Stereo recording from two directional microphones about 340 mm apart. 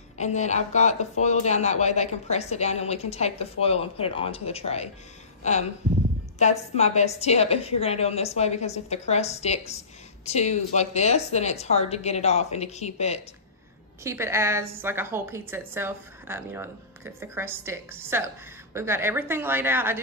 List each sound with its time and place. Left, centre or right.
0.2 s speech: centre
5.4 s a sound: centre
6.3 s speech: centre
14.0 s a woman's voice: centre